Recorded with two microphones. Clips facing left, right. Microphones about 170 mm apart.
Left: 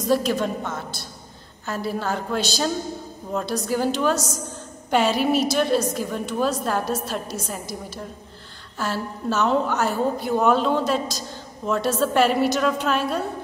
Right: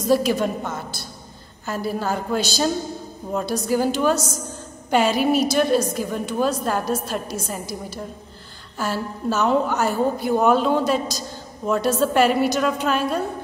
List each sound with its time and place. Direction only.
0.1 s a woman's voice: 5° right (ahead or behind)